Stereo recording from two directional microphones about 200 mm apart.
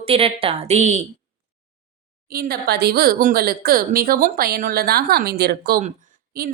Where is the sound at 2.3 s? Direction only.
50° right (ahead or behind).